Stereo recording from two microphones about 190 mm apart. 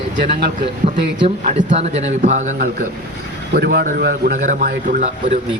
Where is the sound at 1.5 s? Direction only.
40° right (ahead or behind).